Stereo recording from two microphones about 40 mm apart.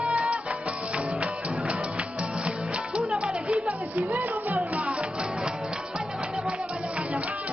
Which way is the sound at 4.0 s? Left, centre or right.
Right.